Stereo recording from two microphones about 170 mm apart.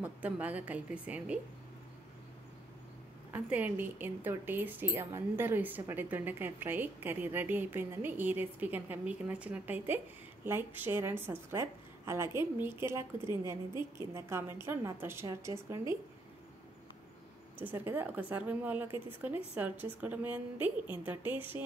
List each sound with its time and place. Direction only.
0.0 s speech: 10° right (ahead or behind)
3.3 s speech: 10° right (ahead or behind)
17.6 s speech: 10° right (ahead or behind)